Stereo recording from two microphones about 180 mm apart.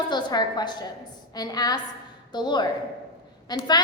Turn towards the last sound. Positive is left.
turn(degrees=25)  # may be behind; listen again after turning